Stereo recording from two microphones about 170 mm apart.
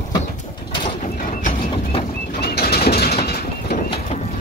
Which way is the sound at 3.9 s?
40° left (ahead or behind).